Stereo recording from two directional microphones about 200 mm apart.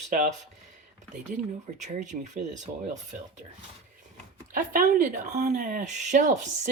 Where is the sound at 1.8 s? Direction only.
35° right (ahead or behind).